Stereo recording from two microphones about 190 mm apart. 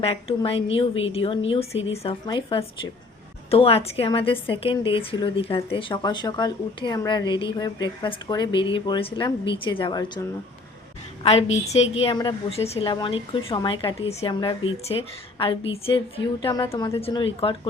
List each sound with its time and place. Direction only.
0.0 s speech: 30° left (ahead or behind)
11.2 s a woman's voice: 30° left (ahead or behind)